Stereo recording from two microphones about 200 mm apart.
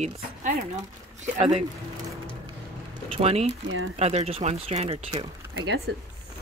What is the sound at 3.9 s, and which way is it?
Speech, 30° right (ahead or behind).